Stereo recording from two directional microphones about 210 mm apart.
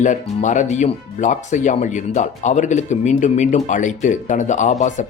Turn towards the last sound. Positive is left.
turn(degrees=35)  # may be behind; listen again after turning